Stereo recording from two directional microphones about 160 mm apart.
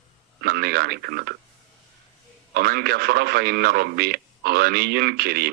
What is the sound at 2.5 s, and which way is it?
A man's voice, 75° right (ahead or behind).